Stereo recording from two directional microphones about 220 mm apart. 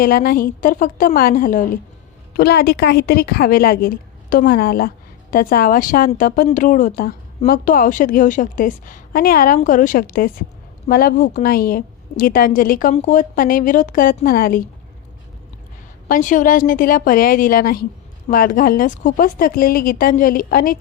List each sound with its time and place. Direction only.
0.0 s a woman's voice: 40° left (ahead or behind)
16.0 s a woman's voice: 35° left (ahead or behind)